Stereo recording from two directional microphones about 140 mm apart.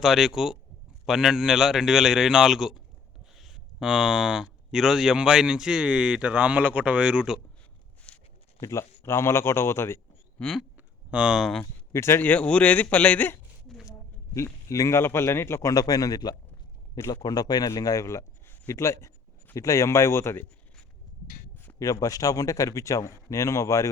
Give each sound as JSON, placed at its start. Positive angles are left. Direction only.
{"t": 0.0, "sound": "speech", "side_deg": 0}
{"t": 8.1, "sound": "a sound", "side_deg": 10}
{"t": 8.6, "sound": "a man's voice", "side_deg": 20}
{"t": 10.4, "sound": "speech", "side_deg": 0}
{"t": 10.8, "sound": "a sound", "side_deg": -5}
{"t": 11.9, "sound": "a man's voice", "side_deg": 15}
{"t": 21.6, "sound": "speech", "side_deg": 20}